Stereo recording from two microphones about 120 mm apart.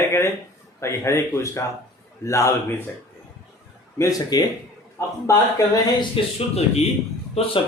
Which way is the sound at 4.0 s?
30° left (ahead or behind).